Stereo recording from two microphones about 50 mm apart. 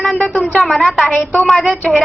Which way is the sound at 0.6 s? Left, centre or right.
Centre.